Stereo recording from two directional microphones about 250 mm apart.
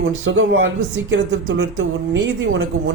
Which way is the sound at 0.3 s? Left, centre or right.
Right.